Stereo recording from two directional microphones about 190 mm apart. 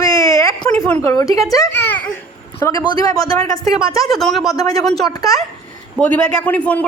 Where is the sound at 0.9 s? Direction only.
10° left (ahead or behind).